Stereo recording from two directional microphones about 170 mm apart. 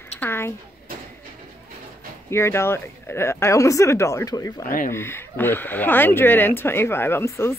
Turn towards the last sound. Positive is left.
turn(degrees=15)  # may be behind; listen again after turning